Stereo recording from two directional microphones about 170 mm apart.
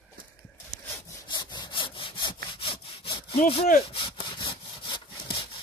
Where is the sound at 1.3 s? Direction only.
25° left (ahead or behind).